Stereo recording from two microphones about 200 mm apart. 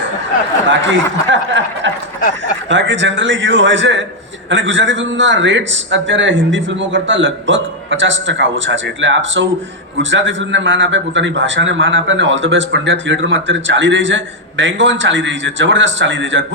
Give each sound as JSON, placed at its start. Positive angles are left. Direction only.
{"t": 0.7, "sound": "a man's voice", "side_deg": -65}